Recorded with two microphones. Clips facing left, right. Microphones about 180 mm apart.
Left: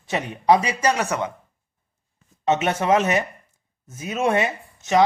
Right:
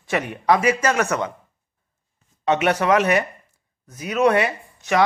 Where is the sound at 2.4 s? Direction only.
25° left (ahead or behind).